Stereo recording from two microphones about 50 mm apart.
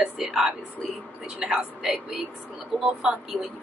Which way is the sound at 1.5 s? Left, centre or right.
Centre.